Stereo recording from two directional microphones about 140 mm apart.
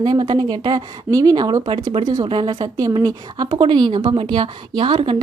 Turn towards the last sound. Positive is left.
turn(degrees=-40)  # may be behind; listen again after turning